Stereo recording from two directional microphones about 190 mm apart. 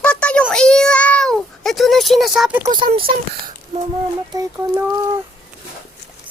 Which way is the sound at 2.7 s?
25° right (ahead or behind).